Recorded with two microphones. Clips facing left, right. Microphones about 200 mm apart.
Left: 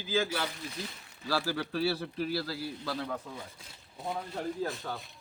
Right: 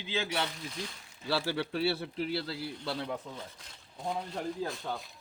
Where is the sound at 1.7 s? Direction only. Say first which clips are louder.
Left 2 dB; 25° right (ahead or behind).